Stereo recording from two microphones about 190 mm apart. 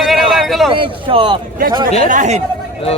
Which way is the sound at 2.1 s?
40° right (ahead or behind).